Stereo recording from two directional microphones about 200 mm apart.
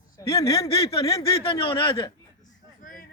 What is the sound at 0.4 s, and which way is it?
Speech, 25° left (ahead or behind).